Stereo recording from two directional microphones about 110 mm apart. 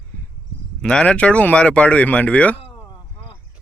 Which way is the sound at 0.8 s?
10° left (ahead or behind).